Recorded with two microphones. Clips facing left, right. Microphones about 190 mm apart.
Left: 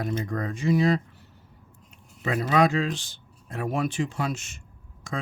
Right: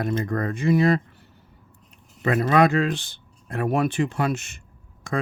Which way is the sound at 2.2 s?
55° right (ahead or behind).